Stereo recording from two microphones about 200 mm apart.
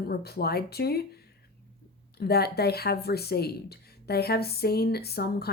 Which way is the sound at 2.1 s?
50° left (ahead or behind).